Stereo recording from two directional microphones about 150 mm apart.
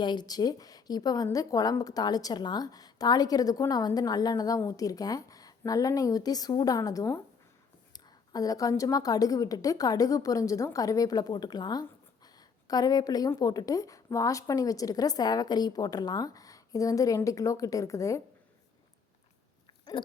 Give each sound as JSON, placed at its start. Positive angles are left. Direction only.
{"t": 0.0, "sound": "a woman's voice", "side_deg": 30}
{"t": 19.6, "sound": "chewing", "side_deg": 30}